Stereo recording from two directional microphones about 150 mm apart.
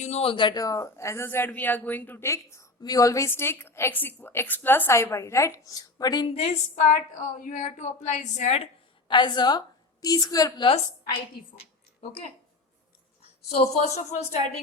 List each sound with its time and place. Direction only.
0.0 s a man's voice: 45° left (ahead or behind); by 6.2 s 25° left (ahead or behind)
6.2 s a woman's voice: 40° left (ahead or behind)
9.0 s a woman's voice: 30° left (ahead or behind)
11.3 s a woman's voice: 90° left
11.9 s speech: 45° left (ahead or behind)
13.8 s a woman's voice: 50° left (ahead or behind)